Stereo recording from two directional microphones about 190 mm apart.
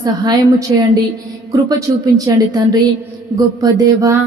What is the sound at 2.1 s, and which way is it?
Speech, 20° right (ahead or behind).